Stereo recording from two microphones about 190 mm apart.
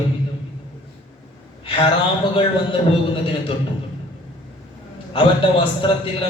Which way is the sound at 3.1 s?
30° left (ahead or behind).